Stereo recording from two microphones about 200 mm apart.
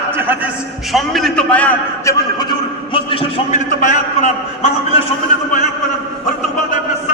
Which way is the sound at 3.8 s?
35° left (ahead or behind).